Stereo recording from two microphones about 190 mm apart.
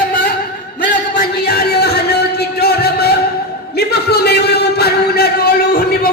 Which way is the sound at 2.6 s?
55° left (ahead or behind).